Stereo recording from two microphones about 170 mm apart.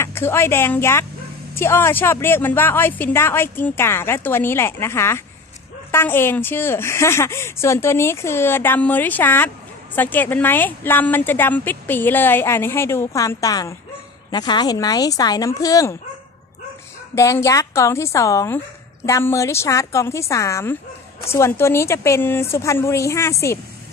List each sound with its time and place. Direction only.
0.0 s a woman's voice: 15° left (ahead or behind)
17.1 s a woman's voice: 15° left (ahead or behind)